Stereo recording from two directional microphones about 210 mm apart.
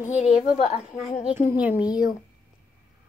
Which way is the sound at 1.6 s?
5° right (ahead or behind).